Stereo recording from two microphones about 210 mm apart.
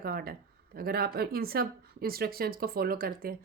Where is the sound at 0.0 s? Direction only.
45° right (ahead or behind).